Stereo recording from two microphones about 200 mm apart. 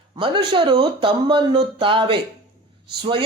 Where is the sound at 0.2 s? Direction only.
25° right (ahead or behind).